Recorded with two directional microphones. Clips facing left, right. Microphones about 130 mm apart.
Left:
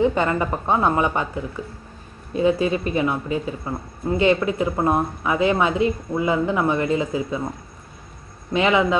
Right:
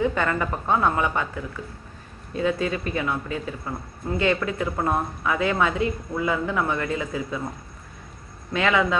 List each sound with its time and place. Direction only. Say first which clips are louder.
0.0 s speech: left 4 dB; 20° left (ahead or behind)
8.5 s speech: left 3 dB; 20° left (ahead or behind)